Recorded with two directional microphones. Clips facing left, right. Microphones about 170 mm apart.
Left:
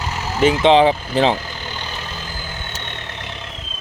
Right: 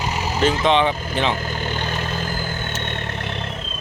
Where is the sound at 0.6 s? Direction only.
35° left (ahead or behind).